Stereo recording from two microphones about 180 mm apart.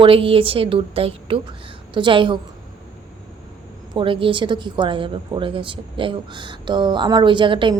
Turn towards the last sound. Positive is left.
turn(degrees=-25)  # may be behind; listen again after turning